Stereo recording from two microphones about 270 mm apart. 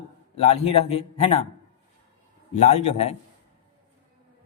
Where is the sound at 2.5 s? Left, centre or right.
Left.